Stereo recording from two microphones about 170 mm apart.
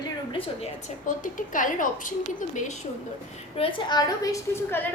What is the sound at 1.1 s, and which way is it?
A woman's voice, 50° left (ahead or behind).